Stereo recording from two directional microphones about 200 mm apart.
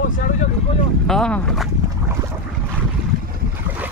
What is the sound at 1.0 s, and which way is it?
Speech, 5° left (ahead or behind).